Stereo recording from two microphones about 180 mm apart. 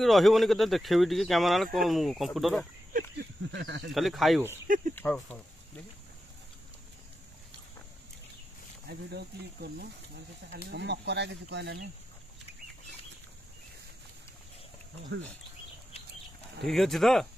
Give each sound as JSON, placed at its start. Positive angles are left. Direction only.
{"t": 0.0, "sound": "speech", "side_deg": 0}
{"t": 2.9, "sound": "a sound", "side_deg": -55}
{"t": 3.9, "sound": "speech", "side_deg": 0}
{"t": 4.6, "sound": "a sound", "side_deg": -50}
{"t": 4.9, "sound": "speech", "side_deg": 10}
{"t": 8.8, "sound": "speech", "side_deg": -65}
{"t": 16.6, "sound": "speech", "side_deg": 0}